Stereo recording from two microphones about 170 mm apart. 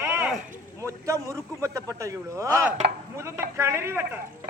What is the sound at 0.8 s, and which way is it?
A man's voice, 15° right (ahead or behind).